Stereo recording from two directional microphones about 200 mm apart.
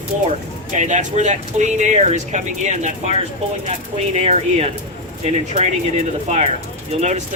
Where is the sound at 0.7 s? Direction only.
35° right (ahead or behind).